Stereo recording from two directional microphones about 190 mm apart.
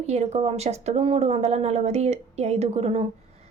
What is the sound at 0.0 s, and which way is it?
A woman's voice, 35° right (ahead or behind).